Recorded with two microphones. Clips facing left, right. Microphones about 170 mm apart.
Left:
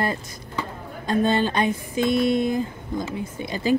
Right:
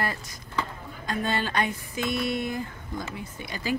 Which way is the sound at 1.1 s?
20° left (ahead or behind).